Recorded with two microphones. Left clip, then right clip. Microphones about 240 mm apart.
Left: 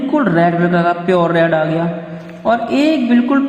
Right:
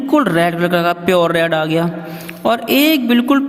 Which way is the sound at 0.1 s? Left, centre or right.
Right.